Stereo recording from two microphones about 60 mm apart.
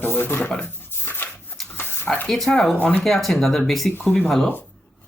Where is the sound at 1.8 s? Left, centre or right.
Left.